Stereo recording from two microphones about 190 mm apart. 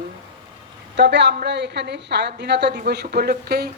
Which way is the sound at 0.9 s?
65° right (ahead or behind).